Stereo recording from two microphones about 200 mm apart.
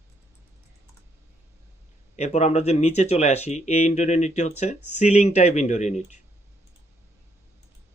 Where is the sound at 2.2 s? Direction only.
35° left (ahead or behind).